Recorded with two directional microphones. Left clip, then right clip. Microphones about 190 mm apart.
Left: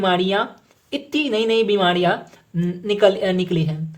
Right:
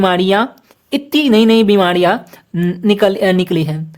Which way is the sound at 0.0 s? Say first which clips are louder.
Right 6 dB; 45° right (ahead or behind).